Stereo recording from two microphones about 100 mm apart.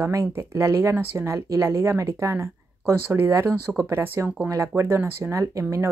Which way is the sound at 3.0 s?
20° right (ahead or behind).